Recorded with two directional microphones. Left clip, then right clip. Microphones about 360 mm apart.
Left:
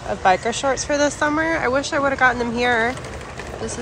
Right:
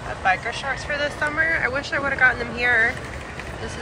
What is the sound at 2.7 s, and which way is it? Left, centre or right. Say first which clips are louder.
Speech: right 2 dB; left.